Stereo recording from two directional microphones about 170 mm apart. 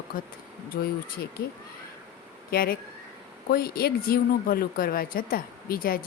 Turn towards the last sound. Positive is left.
turn(degrees=60)  # may be behind; listen again after turning